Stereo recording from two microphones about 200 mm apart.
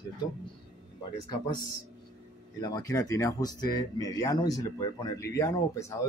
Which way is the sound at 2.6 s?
20° left (ahead or behind).